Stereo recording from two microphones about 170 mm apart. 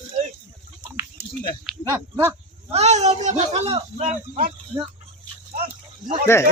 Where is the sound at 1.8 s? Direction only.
20° right (ahead or behind).